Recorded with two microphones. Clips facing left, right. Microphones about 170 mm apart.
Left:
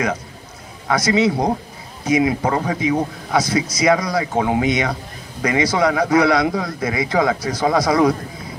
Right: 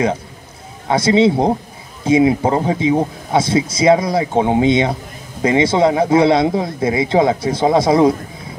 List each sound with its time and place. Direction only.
0.8 s speech: 25° right (ahead or behind)